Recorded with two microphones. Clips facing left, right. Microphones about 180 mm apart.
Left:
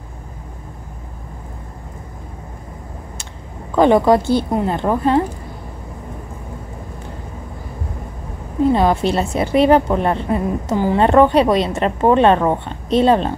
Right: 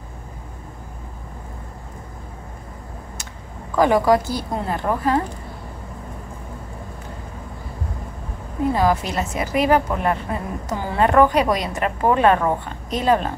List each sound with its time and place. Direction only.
3.7 s a woman's voice: 25° left (ahead or behind)
8.7 s a woman's voice: 25° left (ahead or behind)